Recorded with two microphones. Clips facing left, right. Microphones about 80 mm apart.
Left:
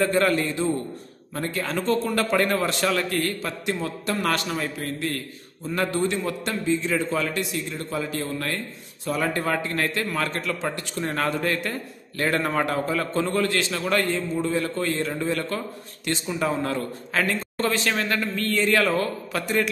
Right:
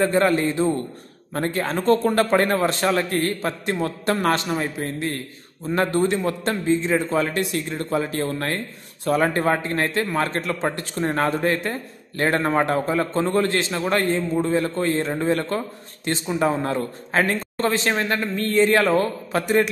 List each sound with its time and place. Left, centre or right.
0.0 s a man's voice: right
1.3 s speech: right
2.2 s a man's voice: right
4.3 s a man's voice: right
5.7 s a man's voice: right